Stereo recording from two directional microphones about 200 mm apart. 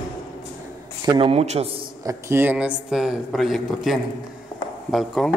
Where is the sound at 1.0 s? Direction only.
25° right (ahead or behind).